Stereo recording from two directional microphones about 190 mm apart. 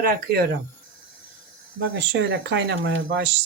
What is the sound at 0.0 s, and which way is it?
Speech, 55° right (ahead or behind).